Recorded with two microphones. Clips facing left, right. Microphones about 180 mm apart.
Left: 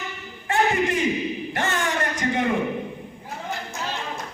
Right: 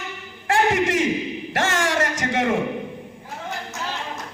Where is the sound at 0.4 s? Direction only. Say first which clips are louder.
Right 2 dB; 90° right.